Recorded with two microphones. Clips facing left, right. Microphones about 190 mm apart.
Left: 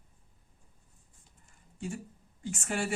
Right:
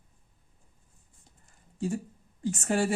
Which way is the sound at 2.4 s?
40° right (ahead or behind).